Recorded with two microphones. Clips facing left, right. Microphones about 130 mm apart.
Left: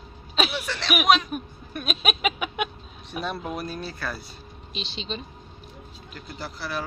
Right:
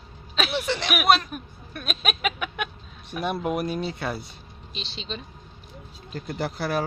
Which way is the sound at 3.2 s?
10° right (ahead or behind).